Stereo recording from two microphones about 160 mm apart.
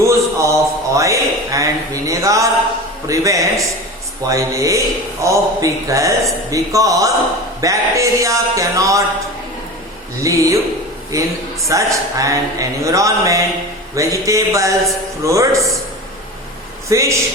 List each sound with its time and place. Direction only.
0.0 s a sound: 20° right (ahead or behind)
0.9 s speech: 20° right (ahead or behind)
10.2 s speech: 20° right (ahead or behind)
16.9 s speech: 20° right (ahead or behind)